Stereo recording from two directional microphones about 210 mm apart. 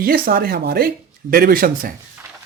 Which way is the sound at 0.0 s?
45° right (ahead or behind).